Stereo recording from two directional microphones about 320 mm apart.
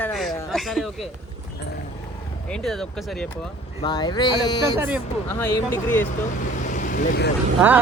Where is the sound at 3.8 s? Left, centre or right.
Centre.